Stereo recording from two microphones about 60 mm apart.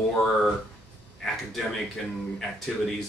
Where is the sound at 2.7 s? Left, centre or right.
Centre.